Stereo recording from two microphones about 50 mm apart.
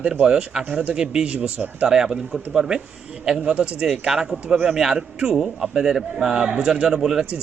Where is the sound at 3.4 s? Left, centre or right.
Right.